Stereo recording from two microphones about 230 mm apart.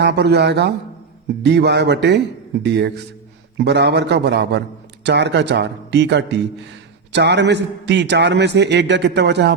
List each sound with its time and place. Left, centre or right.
0.0 s a man's voice: right